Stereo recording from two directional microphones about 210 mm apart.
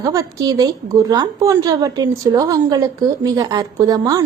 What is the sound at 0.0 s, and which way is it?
A woman's voice, 15° right (ahead or behind).